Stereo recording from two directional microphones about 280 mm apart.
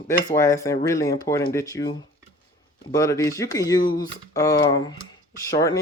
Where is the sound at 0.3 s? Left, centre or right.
Centre.